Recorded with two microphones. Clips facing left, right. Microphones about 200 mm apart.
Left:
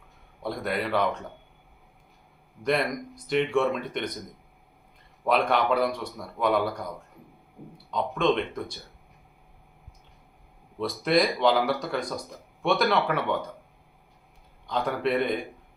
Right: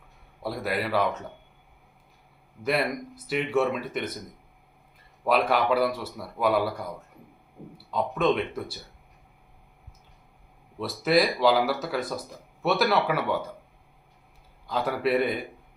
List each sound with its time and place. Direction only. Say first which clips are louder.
0.4 s speech: even; 5° right (ahead or behind)
2.6 s speech: even; 5° right (ahead or behind)
5.2 s speech: even; 5° right (ahead or behind)
10.8 s speech: right 1 dB; 5° right (ahead or behind)
14.7 s speech: right 1 dB; 5° right (ahead or behind)